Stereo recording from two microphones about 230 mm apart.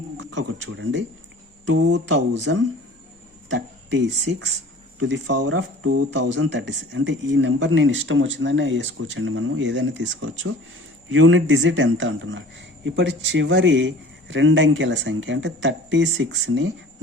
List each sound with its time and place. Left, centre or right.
0.3 s speech: right
5.5 s speech: right